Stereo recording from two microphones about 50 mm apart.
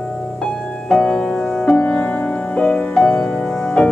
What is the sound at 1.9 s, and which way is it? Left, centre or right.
Music, left.